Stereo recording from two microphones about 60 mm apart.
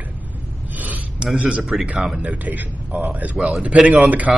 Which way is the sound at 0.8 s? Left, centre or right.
Right.